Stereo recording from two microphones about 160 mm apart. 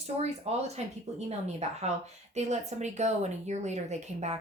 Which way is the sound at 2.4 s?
45° right (ahead or behind).